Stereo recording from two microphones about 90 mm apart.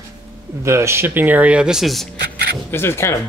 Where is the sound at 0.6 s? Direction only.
30° right (ahead or behind); by 2.1 s centre (ahead or behind).